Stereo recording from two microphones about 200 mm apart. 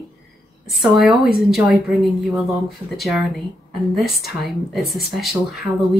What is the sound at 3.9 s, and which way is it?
Speech, centre (ahead or behind).